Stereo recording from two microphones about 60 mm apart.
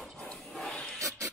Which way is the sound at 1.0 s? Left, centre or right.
Right.